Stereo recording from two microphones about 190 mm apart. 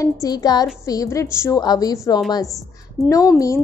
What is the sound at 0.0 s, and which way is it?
A woman's voice, 20° left (ahead or behind).